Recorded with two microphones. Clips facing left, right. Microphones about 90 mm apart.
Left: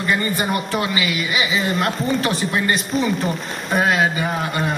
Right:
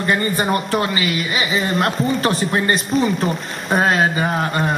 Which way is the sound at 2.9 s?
Centre (ahead or behind).